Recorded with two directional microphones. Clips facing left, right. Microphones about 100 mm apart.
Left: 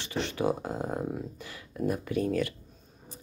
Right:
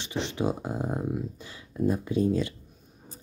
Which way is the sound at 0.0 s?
20° right (ahead or behind).